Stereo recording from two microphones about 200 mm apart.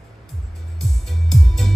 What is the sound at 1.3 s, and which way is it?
Music, centre (ahead or behind).